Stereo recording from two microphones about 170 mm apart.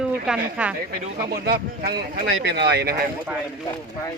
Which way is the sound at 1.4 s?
65° right (ahead or behind).